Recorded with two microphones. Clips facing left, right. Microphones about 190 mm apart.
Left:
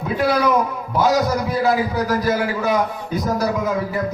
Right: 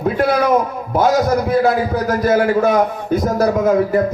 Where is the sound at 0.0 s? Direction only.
50° right (ahead or behind).